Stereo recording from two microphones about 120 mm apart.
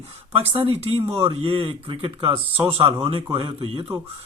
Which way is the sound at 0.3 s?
55° right (ahead or behind).